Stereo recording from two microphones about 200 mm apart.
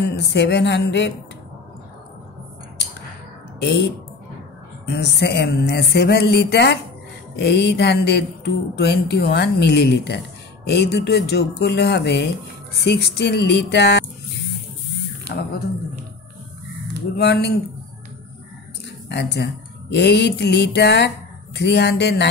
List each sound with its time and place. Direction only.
0.0 s speech: 55° left (ahead or behind)
4.8 s speech: 55° left (ahead or behind)
15.3 s a sound: 50° left (ahead or behind)
17.2 s speech: 55° left (ahead or behind)
19.0 s speech: 55° left (ahead or behind)